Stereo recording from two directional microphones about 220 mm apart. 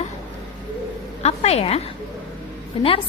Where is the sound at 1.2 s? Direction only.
30° left (ahead or behind).